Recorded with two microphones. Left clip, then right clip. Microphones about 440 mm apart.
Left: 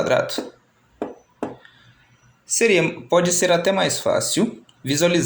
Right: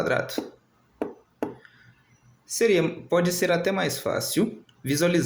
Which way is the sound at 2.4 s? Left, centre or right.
Right.